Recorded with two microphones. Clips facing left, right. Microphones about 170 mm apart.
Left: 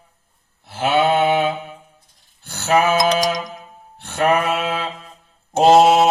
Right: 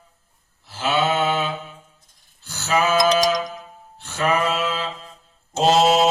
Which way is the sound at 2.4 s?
60° left (ahead or behind).